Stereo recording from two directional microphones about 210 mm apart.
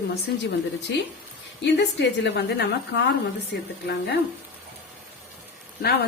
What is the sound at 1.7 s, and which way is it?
A woman's voice, 55° left (ahead or behind).